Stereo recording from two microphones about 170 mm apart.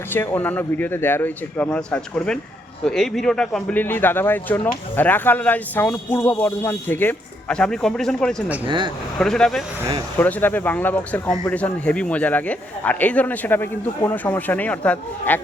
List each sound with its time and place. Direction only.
0.1 s speech: 10° left (ahead or behind)
8.6 s speech: 30° right (ahead or behind)
9.1 s speech: 5° left (ahead or behind)